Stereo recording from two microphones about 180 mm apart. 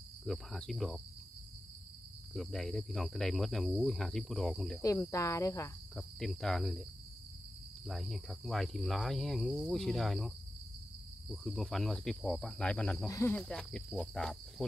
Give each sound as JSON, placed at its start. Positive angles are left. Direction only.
{"t": 0.3, "sound": "speech", "side_deg": 0}
{"t": 2.3, "sound": "speech", "side_deg": 0}
{"t": 4.8, "sound": "cricket", "side_deg": 15}
{"t": 5.9, "sound": "speech", "side_deg": 0}
{"t": 7.8, "sound": "speech", "side_deg": 0}
{"t": 13.1, "sound": "cricket", "side_deg": 15}
{"t": 13.4, "sound": "speech", "side_deg": 5}